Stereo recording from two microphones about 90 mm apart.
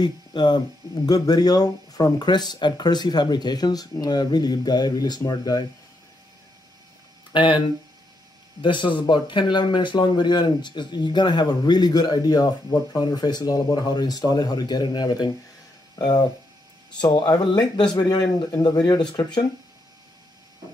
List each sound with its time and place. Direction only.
0.0 s speech: 55° left (ahead or behind)
7.3 s speech: 65° left (ahead or behind); by 16.3 s 45° left (ahead or behind)
17.0 s speech: 60° left (ahead or behind)
17.9 s speech: 40° left (ahead or behind)